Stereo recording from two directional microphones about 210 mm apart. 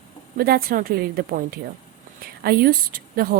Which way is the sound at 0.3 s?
45° right (ahead or behind).